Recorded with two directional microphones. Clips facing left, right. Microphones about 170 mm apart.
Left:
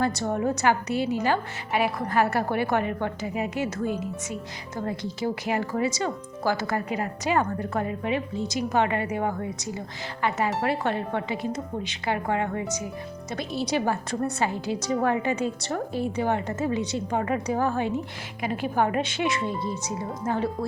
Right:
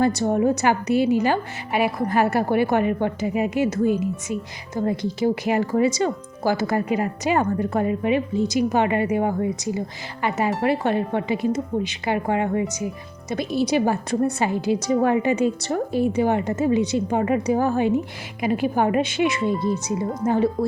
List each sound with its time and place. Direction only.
0.2 s speech: 15° right (ahead or behind)